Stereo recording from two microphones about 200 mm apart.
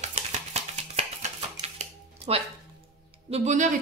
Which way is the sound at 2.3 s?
30° right (ahead or behind).